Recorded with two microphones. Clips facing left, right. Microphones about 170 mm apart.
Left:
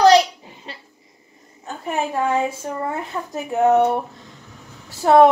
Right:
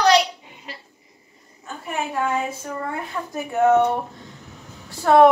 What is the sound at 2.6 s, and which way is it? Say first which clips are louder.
Speech: left 3 dB; 30° left (ahead or behind).